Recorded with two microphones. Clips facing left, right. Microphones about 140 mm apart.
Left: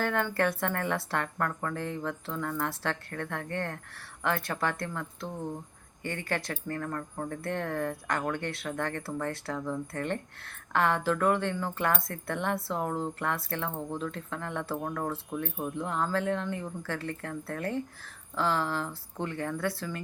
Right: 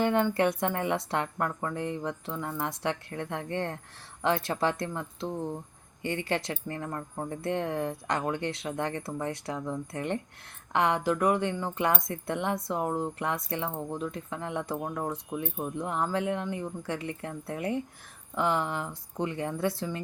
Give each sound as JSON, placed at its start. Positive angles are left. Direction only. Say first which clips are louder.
{"t": 0.0, "sound": "speech", "louder": "right 3 dB", "side_deg": -20}